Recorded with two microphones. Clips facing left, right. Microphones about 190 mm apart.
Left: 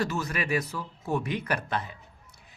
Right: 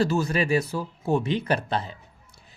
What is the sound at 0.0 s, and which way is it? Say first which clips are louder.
Speech: right 7 dB; 30° right (ahead or behind).